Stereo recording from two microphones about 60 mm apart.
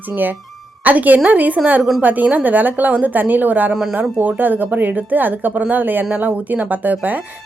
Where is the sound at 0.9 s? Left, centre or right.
Right.